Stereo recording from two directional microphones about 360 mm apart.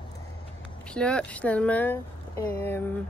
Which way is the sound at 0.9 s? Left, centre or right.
Centre.